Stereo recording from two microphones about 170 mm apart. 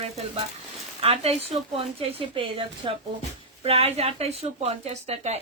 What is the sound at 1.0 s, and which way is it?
A woman's voice, 35° right (ahead or behind).